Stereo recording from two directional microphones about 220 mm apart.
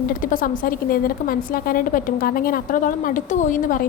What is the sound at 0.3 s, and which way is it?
Speech, 40° left (ahead or behind).